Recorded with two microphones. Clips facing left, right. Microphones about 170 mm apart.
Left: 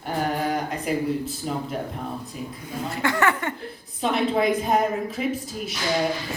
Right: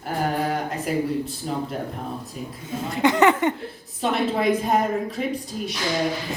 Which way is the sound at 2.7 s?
20° right (ahead or behind).